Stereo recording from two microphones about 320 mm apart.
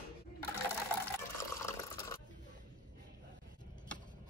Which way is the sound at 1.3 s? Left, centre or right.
Centre.